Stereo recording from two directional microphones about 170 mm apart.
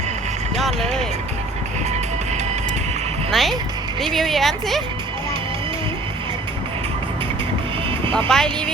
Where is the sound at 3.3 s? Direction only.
Centre (ahead or behind).